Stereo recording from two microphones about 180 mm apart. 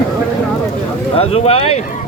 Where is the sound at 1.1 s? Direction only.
35° left (ahead or behind).